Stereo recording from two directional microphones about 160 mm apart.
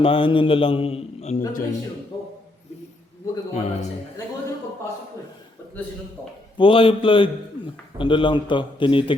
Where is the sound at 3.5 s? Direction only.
45° left (ahead or behind).